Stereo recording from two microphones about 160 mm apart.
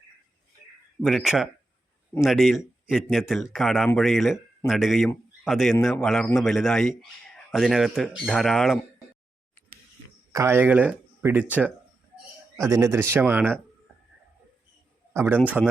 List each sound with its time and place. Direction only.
1.0 s a man's voice: centre (ahead or behind)
10.3 s speech: 15° right (ahead or behind)
15.1 s a man's voice: 15° right (ahead or behind)